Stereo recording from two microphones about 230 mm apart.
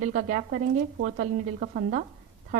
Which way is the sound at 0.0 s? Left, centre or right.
Right.